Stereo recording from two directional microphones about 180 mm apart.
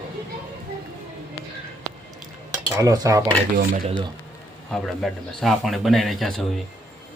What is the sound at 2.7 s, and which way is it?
Speech, 20° right (ahead or behind).